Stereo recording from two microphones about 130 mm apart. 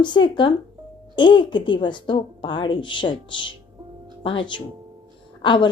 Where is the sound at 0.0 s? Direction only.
35° left (ahead or behind).